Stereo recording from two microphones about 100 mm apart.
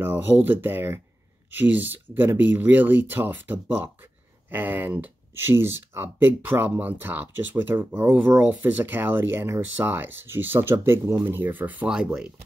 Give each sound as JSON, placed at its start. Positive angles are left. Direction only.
{"t": 0.0, "sound": "speech", "side_deg": -20}